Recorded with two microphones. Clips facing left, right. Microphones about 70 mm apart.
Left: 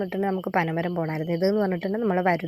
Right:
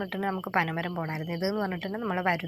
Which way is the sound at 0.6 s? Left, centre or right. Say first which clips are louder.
Left 3 dB; left.